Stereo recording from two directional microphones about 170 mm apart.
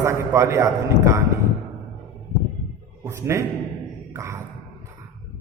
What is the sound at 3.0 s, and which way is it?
Speech, 15° right (ahead or behind).